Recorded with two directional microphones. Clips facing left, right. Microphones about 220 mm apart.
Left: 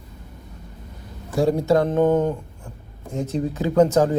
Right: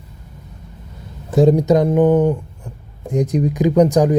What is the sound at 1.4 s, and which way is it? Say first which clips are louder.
Speech: right 5 dB; 20° right (ahead or behind).